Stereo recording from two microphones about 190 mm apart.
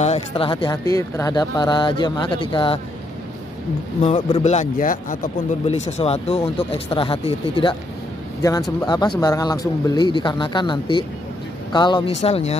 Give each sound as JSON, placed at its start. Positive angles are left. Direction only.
{"t": 0.0, "sound": "speech", "side_deg": 30}
{"t": 4.0, "sound": "a man's voice", "side_deg": 35}
{"t": 8.4, "sound": "a man's voice", "side_deg": 20}